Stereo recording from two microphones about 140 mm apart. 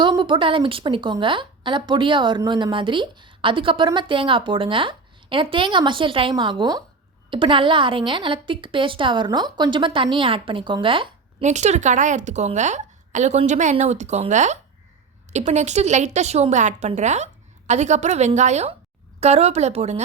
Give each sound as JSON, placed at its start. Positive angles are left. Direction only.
{"t": 0.0, "sound": "a woman's voice", "side_deg": -35}
{"t": 11.4, "sound": "a woman's voice", "side_deg": -55}